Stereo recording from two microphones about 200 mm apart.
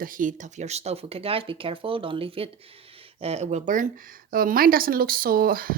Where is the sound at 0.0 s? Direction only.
40° right (ahead or behind).